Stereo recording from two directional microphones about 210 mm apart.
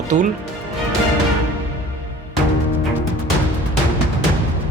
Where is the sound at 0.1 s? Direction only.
35° right (ahead or behind).